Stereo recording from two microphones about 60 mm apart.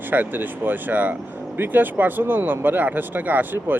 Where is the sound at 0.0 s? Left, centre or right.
Right.